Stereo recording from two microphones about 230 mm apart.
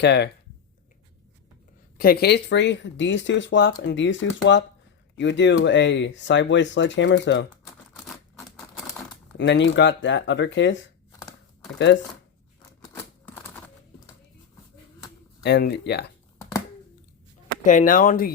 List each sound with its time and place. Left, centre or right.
0.0 s speech: left
2.0 s speech: left
9.4 s speech: left
12.8 s typewriter: centre
15.4 s speech: left
17.6 s speech: left